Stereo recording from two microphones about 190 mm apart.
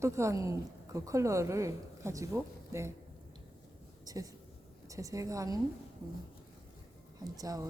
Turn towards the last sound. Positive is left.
turn(degrees=-20)  # may be behind; listen again after turning